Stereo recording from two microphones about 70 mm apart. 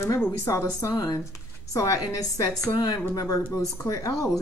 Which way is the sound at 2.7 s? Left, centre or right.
Left.